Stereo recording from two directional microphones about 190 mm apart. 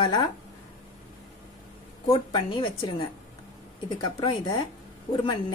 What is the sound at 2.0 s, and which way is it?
A woman's voice, 25° left (ahead or behind).